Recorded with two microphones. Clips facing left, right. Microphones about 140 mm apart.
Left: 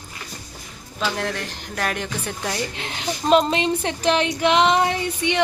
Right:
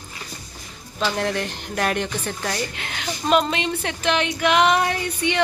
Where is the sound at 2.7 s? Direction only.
30° left (ahead or behind).